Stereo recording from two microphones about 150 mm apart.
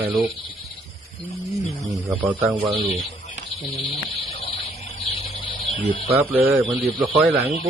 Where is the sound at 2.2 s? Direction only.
10° right (ahead or behind).